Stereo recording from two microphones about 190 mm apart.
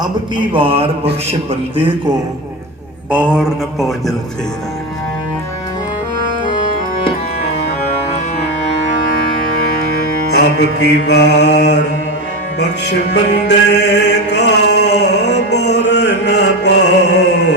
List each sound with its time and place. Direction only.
0.0 s a man's voice: 25° right (ahead or behind)
3.1 s mantra: 5° right (ahead or behind)
9.6 s music: 55° left (ahead or behind)